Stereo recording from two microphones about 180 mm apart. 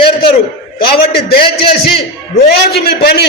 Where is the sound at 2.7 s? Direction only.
60° left (ahead or behind).